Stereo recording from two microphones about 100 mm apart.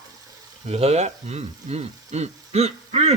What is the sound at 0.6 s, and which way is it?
Speech, 90° right.